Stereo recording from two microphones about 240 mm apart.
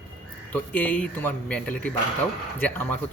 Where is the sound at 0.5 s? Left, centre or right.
Centre.